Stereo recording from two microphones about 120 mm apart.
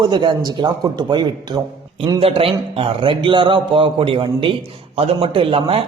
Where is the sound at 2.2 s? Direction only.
55° right (ahead or behind).